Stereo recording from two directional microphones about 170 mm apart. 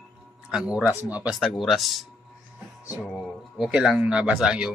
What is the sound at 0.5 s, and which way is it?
Speech, 5° right (ahead or behind).